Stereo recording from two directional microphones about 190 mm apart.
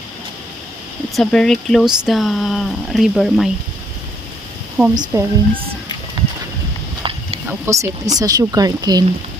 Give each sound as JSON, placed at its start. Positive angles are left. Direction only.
{"t": 1.1, "sound": "speech", "side_deg": 5}
{"t": 4.9, "sound": "speech", "side_deg": -20}
{"t": 7.0, "sound": "a sound", "side_deg": -30}
{"t": 7.4, "sound": "speech", "side_deg": -15}